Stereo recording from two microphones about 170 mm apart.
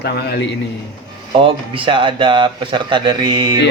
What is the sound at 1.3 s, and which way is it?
A man's voice, 30° right (ahead or behind).